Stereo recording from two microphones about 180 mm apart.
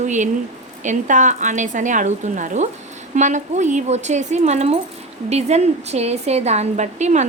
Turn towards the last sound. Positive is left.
turn(degrees=-40)  # may be behind; listen again after turning